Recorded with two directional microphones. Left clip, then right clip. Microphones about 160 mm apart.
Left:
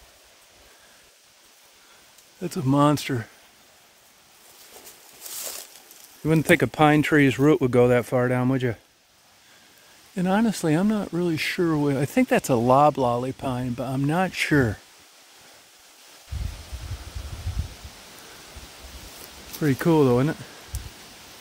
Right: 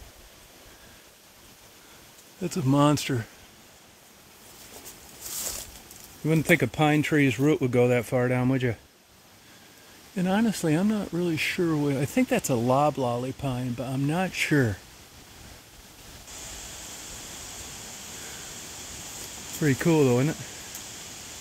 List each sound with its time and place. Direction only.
2.4 s speech: 20° left (ahead or behind)
6.2 s speech: 30° left (ahead or behind); by 8.7 s 15° left (ahead or behind)
10.1 s speech: 25° left (ahead or behind)
19.6 s speech: 5° left (ahead or behind)
19.9 s speech: 20° left (ahead or behind)